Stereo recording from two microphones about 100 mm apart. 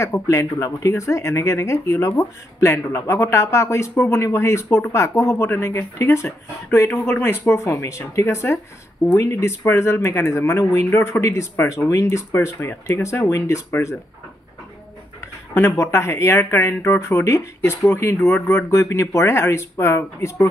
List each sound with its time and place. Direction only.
0.0 s speech: 30° left (ahead or behind)
15.5 s speech: 30° left (ahead or behind)